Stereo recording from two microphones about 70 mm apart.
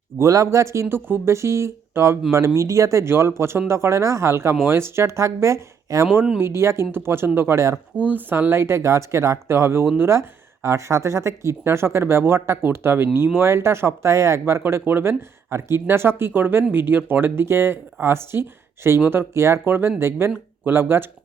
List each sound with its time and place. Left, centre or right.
0.2 s speech: right
1.3 s speech: right
8.0 s speech: right
14.6 s speech: right